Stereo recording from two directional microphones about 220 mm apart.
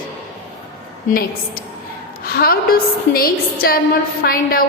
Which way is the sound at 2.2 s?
45° left (ahead or behind).